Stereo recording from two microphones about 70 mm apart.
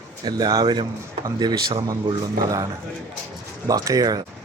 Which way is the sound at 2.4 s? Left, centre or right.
Right.